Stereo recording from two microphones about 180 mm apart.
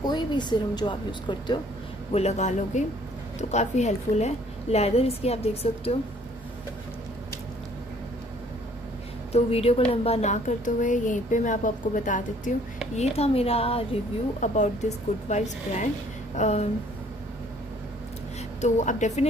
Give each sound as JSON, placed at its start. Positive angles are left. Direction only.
{"t": 0.0, "sound": "speech", "side_deg": 25}
{"t": 2.1, "sound": "a woman's voice", "side_deg": 40}
{"t": 9.3, "sound": "a woman's voice", "side_deg": 35}
{"t": 18.6, "sound": "a woman's voice", "side_deg": 40}